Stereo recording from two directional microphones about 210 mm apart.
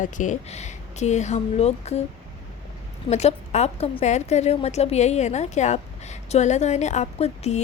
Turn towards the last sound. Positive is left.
turn(degrees=30)  # may be behind; listen again after turning